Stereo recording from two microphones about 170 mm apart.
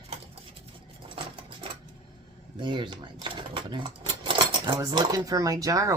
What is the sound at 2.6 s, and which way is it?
Speech, 25° right (ahead or behind).